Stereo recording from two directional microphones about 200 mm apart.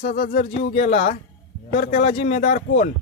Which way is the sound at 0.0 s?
40° left (ahead or behind).